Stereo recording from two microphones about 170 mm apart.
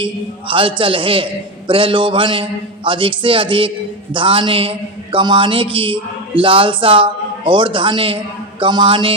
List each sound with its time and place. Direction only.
0.0 s a man's voice: 30° right (ahead or behind)